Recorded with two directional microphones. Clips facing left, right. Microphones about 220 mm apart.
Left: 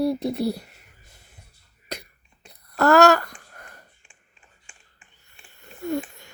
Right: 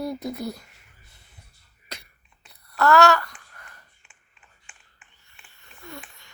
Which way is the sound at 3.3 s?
40° left (ahead or behind).